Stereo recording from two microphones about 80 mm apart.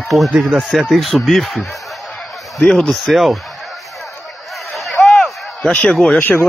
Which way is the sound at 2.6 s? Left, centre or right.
Centre.